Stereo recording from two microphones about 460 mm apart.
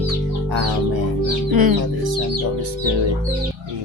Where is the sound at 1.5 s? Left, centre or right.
Right.